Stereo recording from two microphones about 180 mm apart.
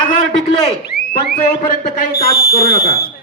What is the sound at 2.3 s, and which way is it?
Speech, 30° left (ahead or behind).